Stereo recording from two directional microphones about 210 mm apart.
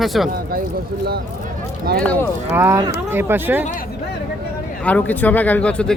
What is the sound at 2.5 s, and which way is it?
Speech, 10° right (ahead or behind).